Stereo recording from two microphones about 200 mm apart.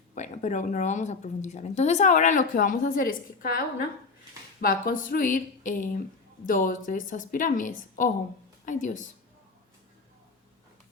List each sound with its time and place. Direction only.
0.1 s speech: 35° left (ahead or behind)